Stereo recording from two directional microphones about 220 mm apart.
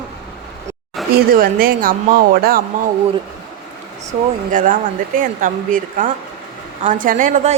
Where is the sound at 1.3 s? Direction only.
40° right (ahead or behind).